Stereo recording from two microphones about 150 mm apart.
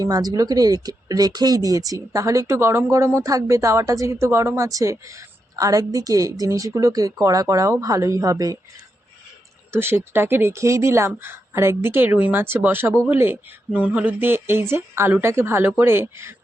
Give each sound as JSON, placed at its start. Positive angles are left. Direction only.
{"t": 0.0, "sound": "speech", "side_deg": -25}
{"t": 9.7, "sound": "speech", "side_deg": -15}